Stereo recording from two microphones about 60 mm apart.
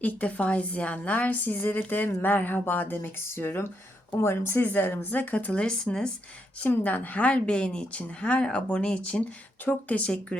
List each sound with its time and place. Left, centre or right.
0.0 s a woman's voice: left
4.6 s a woman's voice: left
5.5 s speech: centre
6.6 s a woman's voice: left